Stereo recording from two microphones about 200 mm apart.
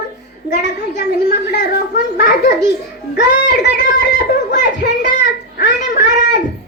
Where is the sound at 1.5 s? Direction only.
55° left (ahead or behind).